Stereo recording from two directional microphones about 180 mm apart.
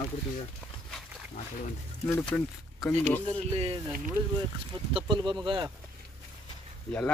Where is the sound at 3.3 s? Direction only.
30° right (ahead or behind).